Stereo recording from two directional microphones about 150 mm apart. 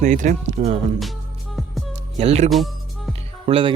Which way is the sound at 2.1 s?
45° right (ahead or behind).